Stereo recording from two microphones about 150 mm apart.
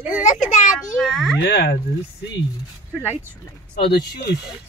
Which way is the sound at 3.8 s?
90° left.